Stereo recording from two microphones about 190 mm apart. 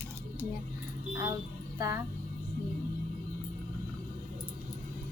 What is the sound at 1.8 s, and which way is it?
Speech, 20° right (ahead or behind).